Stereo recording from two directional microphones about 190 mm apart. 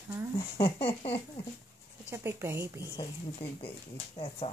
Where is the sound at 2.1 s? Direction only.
15° right (ahead or behind).